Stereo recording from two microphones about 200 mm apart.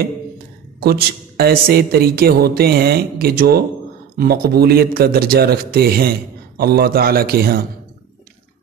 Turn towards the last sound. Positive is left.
turn(degrees=-50)  # may be behind; listen again after turning